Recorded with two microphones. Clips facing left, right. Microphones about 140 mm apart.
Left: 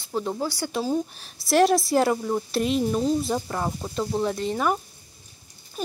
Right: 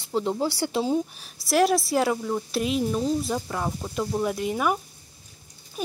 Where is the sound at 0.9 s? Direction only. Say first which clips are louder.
Right 1 dB; 5° right (ahead or behind).